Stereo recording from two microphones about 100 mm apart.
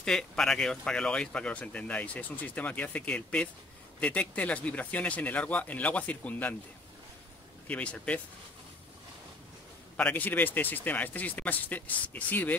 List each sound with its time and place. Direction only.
0.0 s speech: 5° left (ahead or behind)
7.6 s speech: 15° left (ahead or behind)
9.9 s speech: 15° left (ahead or behind)